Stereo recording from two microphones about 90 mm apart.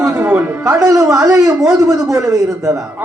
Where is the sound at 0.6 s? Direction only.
40° right (ahead or behind).